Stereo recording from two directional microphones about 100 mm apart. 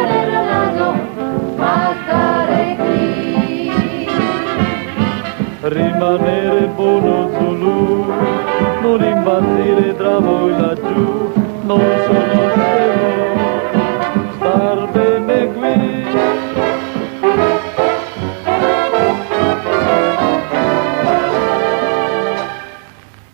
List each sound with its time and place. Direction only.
0.0 s music: 30° left (ahead or behind)
11.7 s music: 30° left (ahead or behind)
18.5 s brass instrument: 25° left (ahead or behind)